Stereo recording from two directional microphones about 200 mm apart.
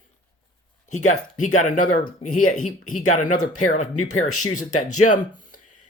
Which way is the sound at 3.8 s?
90° left.